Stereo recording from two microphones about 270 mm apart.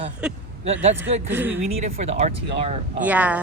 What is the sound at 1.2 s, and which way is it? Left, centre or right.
Speech, centre.